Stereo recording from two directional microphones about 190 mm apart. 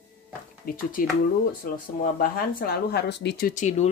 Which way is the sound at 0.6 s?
50° left (ahead or behind).